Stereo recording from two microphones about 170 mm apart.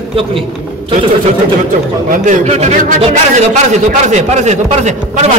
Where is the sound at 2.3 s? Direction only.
40° right (ahead or behind).